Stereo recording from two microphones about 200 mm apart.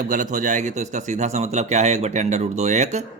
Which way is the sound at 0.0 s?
40° right (ahead or behind).